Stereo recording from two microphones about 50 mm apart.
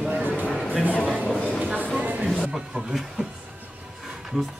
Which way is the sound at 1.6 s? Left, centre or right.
Right.